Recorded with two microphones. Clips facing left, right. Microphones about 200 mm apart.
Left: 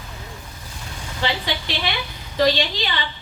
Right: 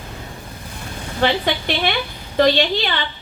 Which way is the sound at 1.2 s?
55° right (ahead or behind).